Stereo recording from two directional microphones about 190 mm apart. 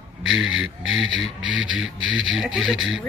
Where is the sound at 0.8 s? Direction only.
90° right.